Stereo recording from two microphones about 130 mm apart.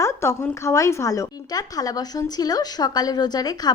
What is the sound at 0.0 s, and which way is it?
A woman's voice, 20° left (ahead or behind).